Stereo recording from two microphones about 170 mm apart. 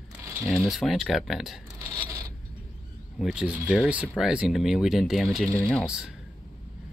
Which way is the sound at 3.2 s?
5° right (ahead or behind).